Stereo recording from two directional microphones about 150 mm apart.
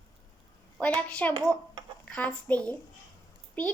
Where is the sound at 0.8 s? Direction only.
10° left (ahead or behind).